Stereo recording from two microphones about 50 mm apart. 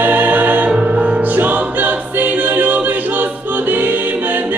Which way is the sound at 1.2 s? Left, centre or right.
Right.